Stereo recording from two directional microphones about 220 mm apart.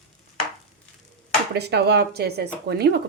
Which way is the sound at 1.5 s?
50° right (ahead or behind).